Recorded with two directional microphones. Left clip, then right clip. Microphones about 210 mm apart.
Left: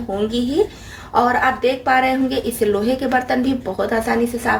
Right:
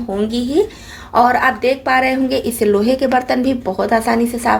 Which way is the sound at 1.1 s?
40° right (ahead or behind).